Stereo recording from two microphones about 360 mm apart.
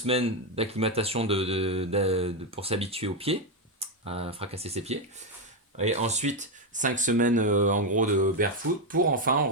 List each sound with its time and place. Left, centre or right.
0.0 s speech: centre